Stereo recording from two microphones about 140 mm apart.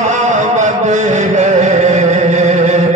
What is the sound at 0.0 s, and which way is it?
Carnatic music, 60° right (ahead or behind).